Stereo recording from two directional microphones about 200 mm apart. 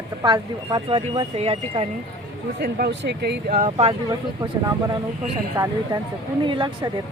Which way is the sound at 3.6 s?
30° right (ahead or behind).